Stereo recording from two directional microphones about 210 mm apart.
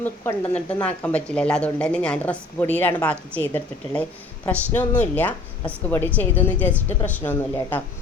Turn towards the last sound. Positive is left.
turn(degrees=10)  # may be behind; listen again after turning